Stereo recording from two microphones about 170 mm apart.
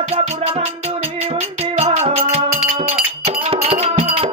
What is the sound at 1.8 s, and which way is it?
Music, 35° right (ahead or behind).